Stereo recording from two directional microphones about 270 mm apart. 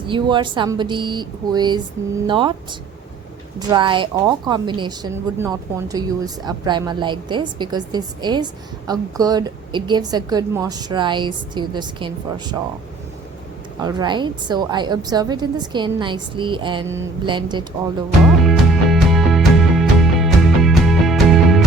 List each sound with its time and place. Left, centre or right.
0.1 s a woman's voice: centre
3.7 s a woman's voice: centre
13.7 s a woman's voice: centre
18.3 s music: centre